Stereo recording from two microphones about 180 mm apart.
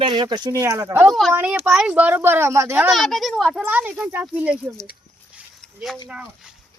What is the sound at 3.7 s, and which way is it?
Speech, 10° right (ahead or behind).